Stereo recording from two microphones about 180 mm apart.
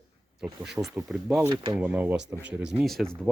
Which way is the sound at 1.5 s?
25° right (ahead or behind).